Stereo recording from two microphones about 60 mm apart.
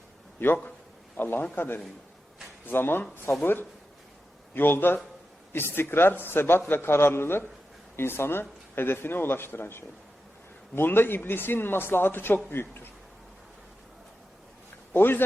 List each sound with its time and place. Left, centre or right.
0.3 s a man's voice: left
14.9 s speech: left